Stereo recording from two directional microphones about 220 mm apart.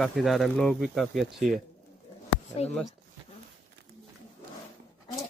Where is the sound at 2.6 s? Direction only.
30° left (ahead or behind).